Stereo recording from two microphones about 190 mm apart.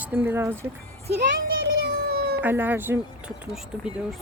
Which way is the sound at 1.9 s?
55° right (ahead or behind).